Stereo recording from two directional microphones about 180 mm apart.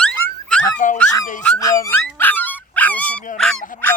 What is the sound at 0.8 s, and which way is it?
Speech, 45° left (ahead or behind).